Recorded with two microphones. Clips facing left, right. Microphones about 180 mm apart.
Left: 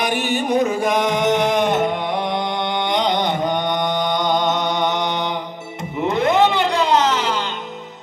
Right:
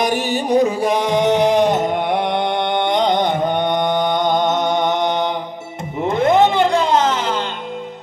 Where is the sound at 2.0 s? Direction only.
60° right (ahead or behind).